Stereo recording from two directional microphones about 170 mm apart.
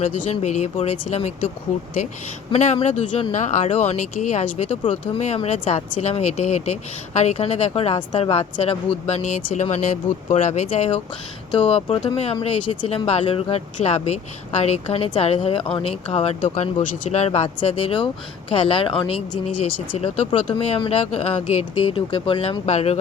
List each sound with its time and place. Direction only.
0.0 s speech: 45° left (ahead or behind)
2.5 s speech: 45° left (ahead or behind)
12.0 s speech: 35° left (ahead or behind)